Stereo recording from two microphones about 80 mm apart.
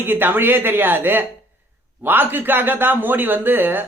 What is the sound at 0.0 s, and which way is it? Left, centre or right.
Speech, right.